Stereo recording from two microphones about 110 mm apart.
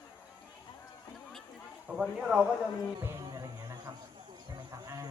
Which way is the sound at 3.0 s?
25° right (ahead or behind).